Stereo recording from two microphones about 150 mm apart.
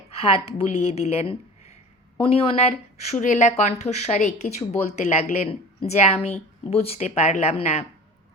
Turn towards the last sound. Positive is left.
turn(degrees=50)  # may be behind; listen again after turning